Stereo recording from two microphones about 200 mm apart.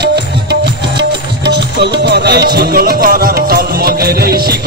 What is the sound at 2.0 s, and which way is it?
Music, 55° right (ahead or behind).